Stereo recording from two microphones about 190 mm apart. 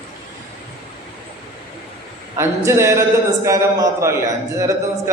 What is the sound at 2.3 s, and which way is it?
A man's voice, 15° right (ahead or behind).